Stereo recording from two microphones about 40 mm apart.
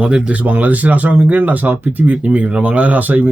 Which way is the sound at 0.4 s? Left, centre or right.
Right.